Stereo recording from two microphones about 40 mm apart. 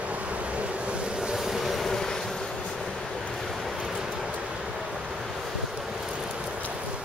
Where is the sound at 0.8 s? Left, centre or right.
Right.